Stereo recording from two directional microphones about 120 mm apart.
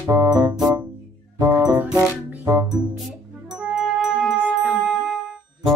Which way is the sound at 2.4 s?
25° right (ahead or behind).